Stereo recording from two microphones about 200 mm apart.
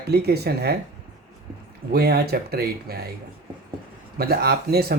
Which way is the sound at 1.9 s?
50° right (ahead or behind).